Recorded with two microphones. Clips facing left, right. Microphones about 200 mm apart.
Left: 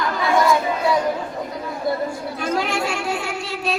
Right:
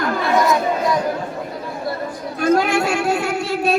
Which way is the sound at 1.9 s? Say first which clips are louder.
Left 4 dB; 20° left (ahead or behind).